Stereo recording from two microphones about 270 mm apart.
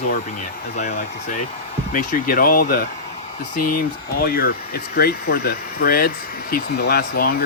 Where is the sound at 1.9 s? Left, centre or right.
Left.